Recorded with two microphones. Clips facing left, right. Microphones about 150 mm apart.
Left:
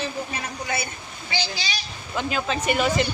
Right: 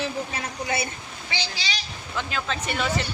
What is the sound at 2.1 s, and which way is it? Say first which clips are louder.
Speech: left 4 dB; 15° left (ahead or behind).